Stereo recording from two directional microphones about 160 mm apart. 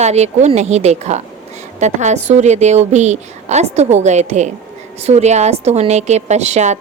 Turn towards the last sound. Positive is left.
turn(degrees=-45)  # may be behind; listen again after turning